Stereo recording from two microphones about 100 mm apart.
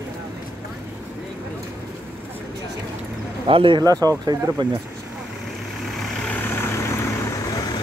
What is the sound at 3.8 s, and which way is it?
Speech, 35° right (ahead or behind).